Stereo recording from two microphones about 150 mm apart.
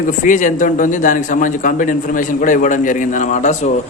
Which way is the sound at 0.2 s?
60° left (ahead or behind).